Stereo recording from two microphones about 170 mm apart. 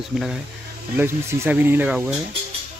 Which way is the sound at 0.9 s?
10° right (ahead or behind).